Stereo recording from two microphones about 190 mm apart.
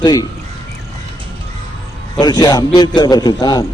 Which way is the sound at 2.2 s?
20° left (ahead or behind).